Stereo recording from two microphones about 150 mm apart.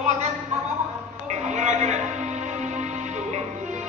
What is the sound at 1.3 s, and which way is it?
Music, 50° right (ahead or behind).